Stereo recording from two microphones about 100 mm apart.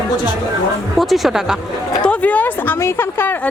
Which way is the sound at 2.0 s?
15° left (ahead or behind).